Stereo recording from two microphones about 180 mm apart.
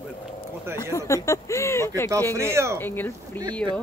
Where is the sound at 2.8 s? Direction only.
10° left (ahead or behind).